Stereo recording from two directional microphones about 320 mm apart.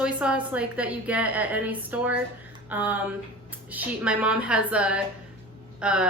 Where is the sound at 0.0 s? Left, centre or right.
Centre.